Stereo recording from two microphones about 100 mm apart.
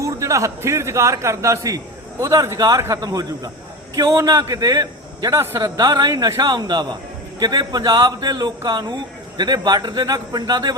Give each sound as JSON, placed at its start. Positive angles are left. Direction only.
{"t": 0.0, "sound": "a man's voice", "side_deg": -30}